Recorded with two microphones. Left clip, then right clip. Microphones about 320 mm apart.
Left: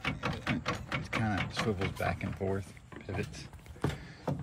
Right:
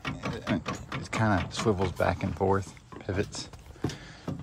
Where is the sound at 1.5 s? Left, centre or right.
Centre.